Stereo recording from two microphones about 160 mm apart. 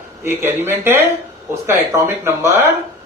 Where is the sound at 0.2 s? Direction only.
15° right (ahead or behind).